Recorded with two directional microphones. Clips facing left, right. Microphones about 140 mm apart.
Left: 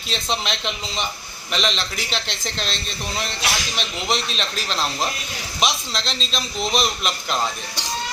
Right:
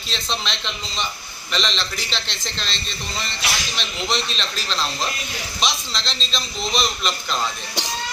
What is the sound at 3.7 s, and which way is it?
Speech, 5° left (ahead or behind).